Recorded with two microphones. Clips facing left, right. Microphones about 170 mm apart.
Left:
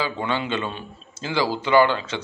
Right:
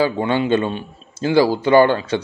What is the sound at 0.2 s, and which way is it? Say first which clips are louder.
Speech: right 7 dB; 30° right (ahead or behind).